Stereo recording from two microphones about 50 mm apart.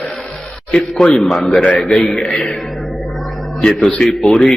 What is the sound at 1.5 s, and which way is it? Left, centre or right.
Speech, left.